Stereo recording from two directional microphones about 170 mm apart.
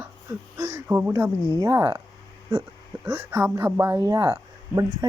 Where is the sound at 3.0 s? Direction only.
10° right (ahead or behind).